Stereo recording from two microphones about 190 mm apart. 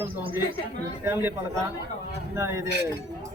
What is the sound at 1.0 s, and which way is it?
Speech, 10° right (ahead or behind).